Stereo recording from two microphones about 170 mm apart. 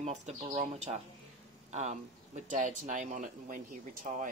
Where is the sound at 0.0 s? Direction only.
40° right (ahead or behind).